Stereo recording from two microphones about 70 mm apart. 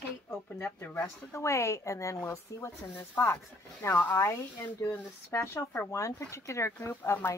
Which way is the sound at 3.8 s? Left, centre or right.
Left.